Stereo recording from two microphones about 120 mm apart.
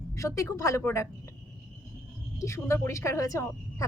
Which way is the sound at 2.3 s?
25° left (ahead or behind).